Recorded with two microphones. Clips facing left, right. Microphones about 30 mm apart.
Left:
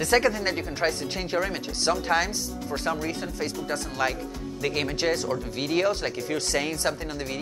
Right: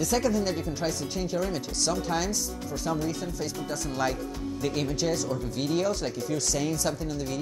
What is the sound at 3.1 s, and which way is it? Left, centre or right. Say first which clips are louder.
Speech: left 2 dB; left.